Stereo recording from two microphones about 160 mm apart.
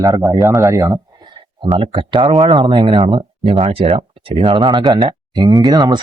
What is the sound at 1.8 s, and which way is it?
Speech, 30° right (ahead or behind).